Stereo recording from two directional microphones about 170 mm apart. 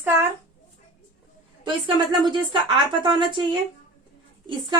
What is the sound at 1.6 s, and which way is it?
Speech, 25° right (ahead or behind).